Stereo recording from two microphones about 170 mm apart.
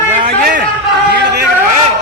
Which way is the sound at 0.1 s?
55° right (ahead or behind).